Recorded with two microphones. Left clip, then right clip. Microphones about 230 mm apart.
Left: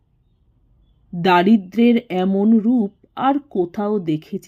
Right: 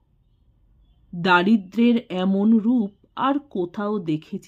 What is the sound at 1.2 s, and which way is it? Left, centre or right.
Speech, centre.